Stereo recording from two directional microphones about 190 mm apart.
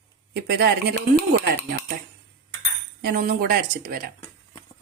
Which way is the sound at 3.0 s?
55° right (ahead or behind).